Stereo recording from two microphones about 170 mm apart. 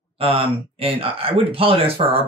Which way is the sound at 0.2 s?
35° right (ahead or behind).